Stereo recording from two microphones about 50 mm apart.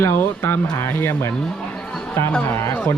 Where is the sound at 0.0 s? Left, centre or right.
Left.